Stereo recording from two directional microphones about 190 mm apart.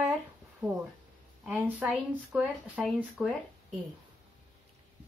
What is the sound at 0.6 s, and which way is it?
Speech, 15° right (ahead or behind).